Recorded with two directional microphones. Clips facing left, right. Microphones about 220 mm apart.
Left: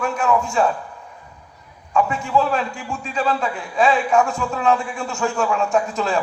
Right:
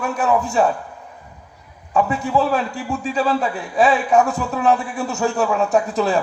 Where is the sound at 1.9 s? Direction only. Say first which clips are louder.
Right 1 dB; 20° right (ahead or behind).